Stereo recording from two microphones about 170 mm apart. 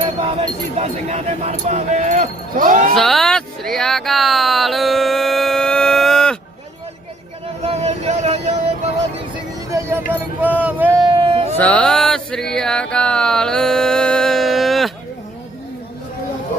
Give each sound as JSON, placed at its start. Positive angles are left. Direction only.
{"t": 0.8, "sound": "speech", "side_deg": -40}
{"t": 2.9, "sound": "speech", "side_deg": 0}
{"t": 7.4, "sound": "music", "side_deg": -35}
{"t": 10.1, "sound": "speech", "side_deg": -10}
{"t": 11.0, "sound": "a sound", "side_deg": -30}
{"t": 11.5, "sound": "a sound", "side_deg": 10}